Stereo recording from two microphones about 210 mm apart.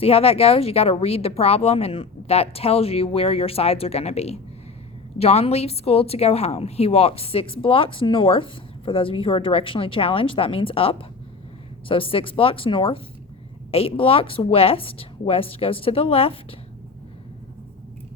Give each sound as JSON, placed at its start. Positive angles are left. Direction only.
{"t": 0.0, "sound": "a woman's voice", "side_deg": 30}